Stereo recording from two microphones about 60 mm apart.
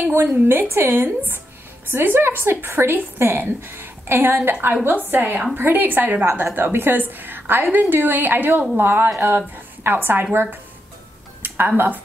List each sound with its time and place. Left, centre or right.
0.1 s a woman's voice: right